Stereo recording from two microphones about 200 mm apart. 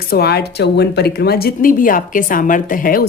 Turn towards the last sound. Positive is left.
turn(degrees=45)  # may be behind; listen again after turning